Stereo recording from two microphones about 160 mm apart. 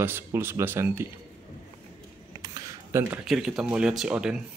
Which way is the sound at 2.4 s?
20° right (ahead or behind).